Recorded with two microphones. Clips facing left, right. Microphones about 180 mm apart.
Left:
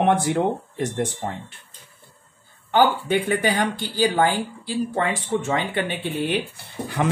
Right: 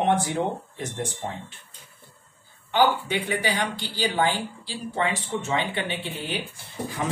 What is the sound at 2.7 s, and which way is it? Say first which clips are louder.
Speech: left 3 dB; 50° left (ahead or behind).